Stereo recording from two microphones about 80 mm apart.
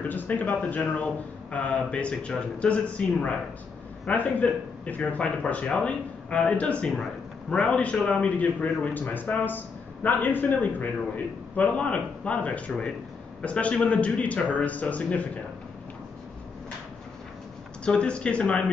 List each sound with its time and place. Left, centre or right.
0.1 s a man's voice: left
17.8 s a man's voice: centre